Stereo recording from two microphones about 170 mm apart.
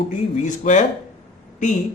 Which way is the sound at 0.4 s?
45° left (ahead or behind).